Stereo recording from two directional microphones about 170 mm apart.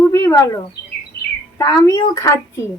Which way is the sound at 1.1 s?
70° left (ahead or behind).